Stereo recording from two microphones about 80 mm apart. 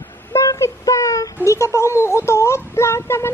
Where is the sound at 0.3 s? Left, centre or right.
Left.